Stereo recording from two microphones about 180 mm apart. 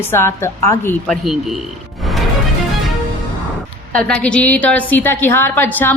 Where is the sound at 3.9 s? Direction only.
5° left (ahead or behind).